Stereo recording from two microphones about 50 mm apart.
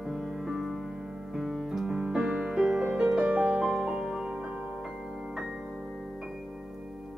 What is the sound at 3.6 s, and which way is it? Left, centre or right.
Music, centre.